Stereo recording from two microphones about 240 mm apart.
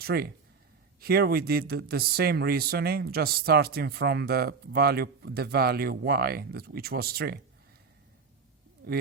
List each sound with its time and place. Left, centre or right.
0.0 s speech: right